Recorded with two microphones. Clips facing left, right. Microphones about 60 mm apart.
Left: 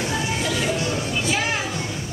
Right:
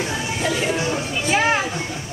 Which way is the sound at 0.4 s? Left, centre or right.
Right.